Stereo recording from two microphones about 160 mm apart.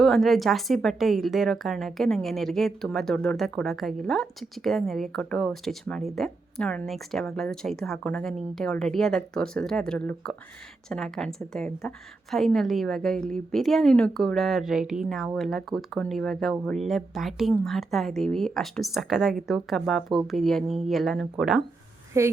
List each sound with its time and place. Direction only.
0.0 s a woman's voice: centre (ahead or behind)
22.1 s a woman's voice: 15° right (ahead or behind)